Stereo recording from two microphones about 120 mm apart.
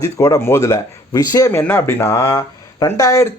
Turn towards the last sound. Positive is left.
turn(degrees=25)  # may be behind; listen again after turning